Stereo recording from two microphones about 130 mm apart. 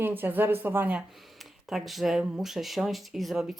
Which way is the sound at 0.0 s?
15° right (ahead or behind).